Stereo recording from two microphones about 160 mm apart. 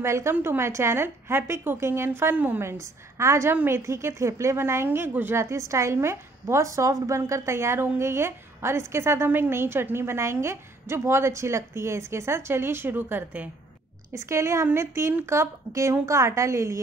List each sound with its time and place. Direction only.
0.0 s a woman's voice: 15° right (ahead or behind)